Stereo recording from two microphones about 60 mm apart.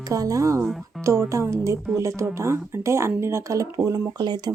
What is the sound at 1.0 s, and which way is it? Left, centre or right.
Speech, right.